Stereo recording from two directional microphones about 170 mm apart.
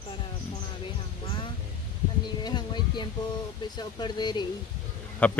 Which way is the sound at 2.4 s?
25° left (ahead or behind).